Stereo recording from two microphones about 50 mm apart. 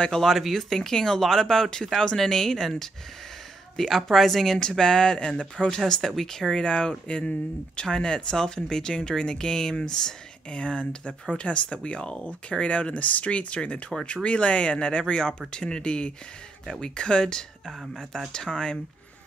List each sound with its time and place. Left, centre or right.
0.2 s speech: centre